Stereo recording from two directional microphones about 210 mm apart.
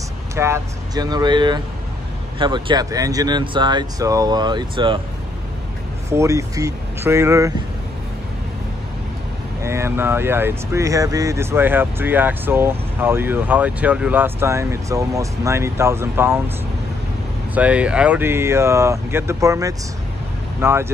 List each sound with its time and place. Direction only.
0.4 s speech: 15° right (ahead or behind)
6.0 s speech: 15° right (ahead or behind)
9.6 s speech: 10° right (ahead or behind)
17.6 s speech: 5° right (ahead or behind)